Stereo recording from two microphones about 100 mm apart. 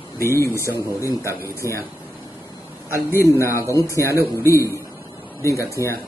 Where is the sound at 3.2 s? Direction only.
25° left (ahead or behind).